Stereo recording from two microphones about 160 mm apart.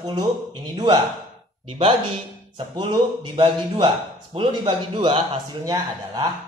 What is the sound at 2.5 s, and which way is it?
Speech, 30° right (ahead or behind).